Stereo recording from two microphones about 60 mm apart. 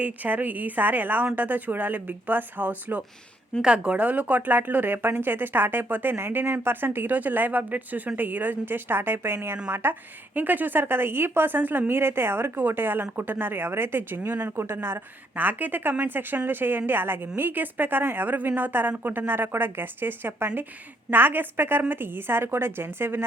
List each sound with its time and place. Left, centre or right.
0.0 s a woman's voice: right
3.6 s a woman's voice: centre; by 23.2 s right